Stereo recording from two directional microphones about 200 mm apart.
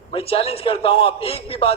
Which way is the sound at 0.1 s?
30° left (ahead or behind).